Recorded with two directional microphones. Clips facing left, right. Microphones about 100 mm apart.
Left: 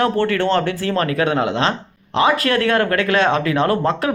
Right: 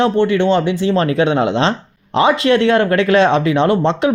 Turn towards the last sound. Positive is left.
turn(degrees=-25)  # may be behind; listen again after turning